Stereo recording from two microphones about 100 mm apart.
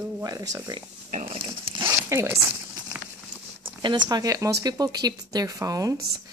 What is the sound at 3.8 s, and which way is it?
Speech, 45° right (ahead or behind).